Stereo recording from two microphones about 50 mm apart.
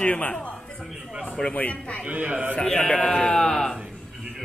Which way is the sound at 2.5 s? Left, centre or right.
Centre.